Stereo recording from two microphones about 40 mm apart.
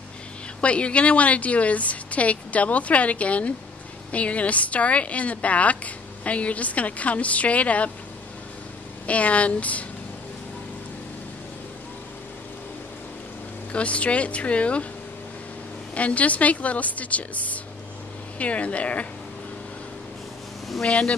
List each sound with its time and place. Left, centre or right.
0.6 s speech: left
9.0 s speech: left
13.7 s speech: left
15.9 s speech: left
20.8 s speech: left